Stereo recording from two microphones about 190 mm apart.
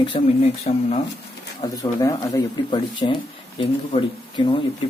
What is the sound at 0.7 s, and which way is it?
Speech, 35° left (ahead or behind).